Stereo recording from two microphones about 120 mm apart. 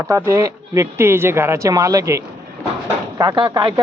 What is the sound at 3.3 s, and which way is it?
Speech, 40° right (ahead or behind).